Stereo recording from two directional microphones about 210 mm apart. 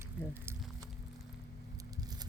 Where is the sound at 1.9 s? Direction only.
20° right (ahead or behind).